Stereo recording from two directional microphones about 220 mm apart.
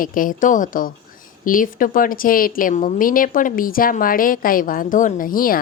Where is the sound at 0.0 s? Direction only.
40° left (ahead or behind).